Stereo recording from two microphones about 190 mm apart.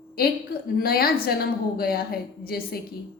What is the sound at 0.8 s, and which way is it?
A woman's voice, 55° left (ahead or behind).